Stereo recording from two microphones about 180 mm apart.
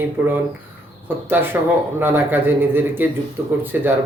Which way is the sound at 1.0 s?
10° right (ahead or behind).